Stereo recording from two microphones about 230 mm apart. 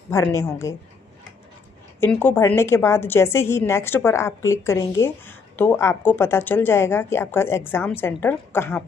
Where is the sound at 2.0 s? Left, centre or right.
Centre.